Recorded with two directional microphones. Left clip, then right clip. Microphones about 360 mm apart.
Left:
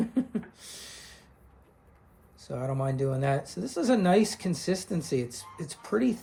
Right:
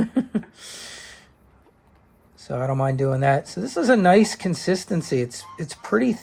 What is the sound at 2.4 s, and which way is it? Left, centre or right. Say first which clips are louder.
Speech: right 8 dB; right.